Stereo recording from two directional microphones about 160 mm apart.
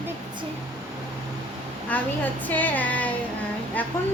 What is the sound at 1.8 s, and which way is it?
A woman's voice, 10° left (ahead or behind).